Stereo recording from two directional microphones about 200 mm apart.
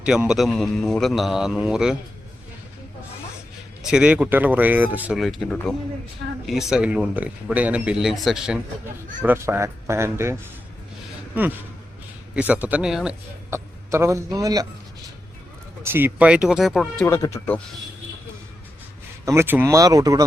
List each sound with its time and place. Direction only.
0.0 s speech: 5° right (ahead or behind)
3.8 s speech: 5° right (ahead or behind)
12.3 s speech: 5° right (ahead or behind)
13.5 s speech: 15° right (ahead or behind)
15.8 s speech: 10° right (ahead or behind)
17.1 s speech: 15° left (ahead or behind)
19.2 s speech: 15° right (ahead or behind)